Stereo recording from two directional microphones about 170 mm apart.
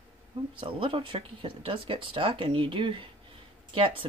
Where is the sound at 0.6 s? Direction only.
30° right (ahead or behind).